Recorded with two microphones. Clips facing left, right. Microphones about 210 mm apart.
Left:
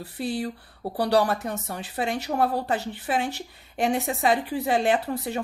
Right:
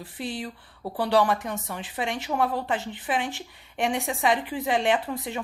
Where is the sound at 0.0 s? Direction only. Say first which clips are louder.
Left 4 dB; 40° left (ahead or behind).